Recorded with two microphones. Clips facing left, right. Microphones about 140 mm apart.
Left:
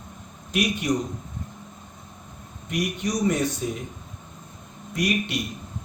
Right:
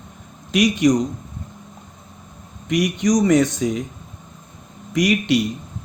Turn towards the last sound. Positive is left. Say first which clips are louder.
# right 8 dB
turn(degrees=-90)